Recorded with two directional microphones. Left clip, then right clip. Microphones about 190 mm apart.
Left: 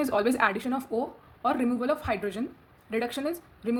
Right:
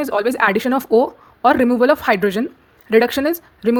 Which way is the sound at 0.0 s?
50° right (ahead or behind).